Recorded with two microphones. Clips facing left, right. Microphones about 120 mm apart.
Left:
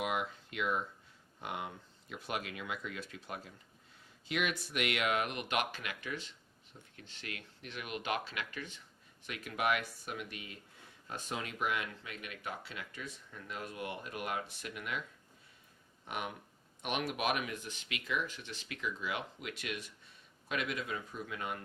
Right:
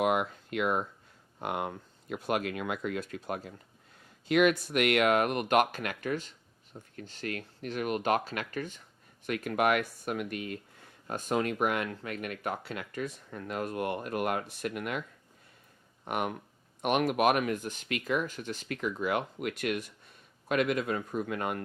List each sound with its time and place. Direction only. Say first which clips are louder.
0.0 s speech: right 8 dB; 55° right (ahead or behind)
16.0 s a man's voice: right 8 dB; 55° right (ahead or behind)